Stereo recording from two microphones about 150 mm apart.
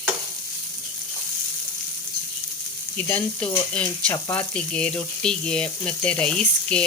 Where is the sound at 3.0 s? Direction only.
10° left (ahead or behind).